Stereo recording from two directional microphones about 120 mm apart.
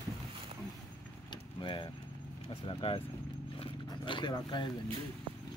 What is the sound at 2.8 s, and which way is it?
Speech, 55° left (ahead or behind).